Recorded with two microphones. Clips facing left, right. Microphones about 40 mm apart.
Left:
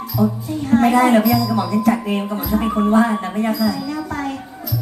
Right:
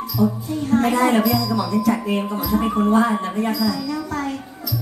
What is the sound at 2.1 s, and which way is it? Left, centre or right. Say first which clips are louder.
Speech: left 1 dB; left.